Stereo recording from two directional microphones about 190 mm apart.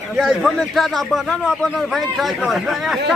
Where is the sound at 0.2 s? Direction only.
Centre (ahead or behind).